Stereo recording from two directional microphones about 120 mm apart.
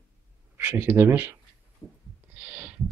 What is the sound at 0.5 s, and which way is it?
Speech, 20° right (ahead or behind).